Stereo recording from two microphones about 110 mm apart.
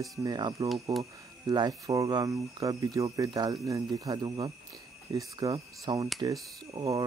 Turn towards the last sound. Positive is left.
turn(degrees=-30)  # may be behind; listen again after turning